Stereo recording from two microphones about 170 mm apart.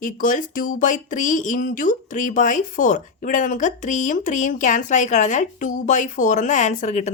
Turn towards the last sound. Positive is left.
turn(degrees=45)  # may be behind; listen again after turning